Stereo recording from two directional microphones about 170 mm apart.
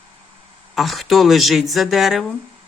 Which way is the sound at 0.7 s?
Centre (ahead or behind).